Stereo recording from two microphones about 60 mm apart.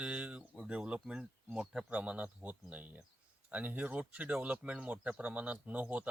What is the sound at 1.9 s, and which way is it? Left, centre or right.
Speech, right.